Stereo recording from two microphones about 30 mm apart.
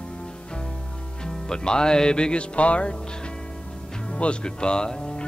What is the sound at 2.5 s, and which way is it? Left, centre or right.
Speech, left.